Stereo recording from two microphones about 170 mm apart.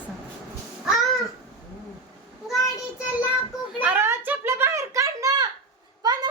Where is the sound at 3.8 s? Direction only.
10° right (ahead or behind).